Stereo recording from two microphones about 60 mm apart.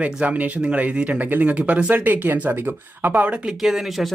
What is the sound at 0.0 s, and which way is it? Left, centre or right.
Speech, right.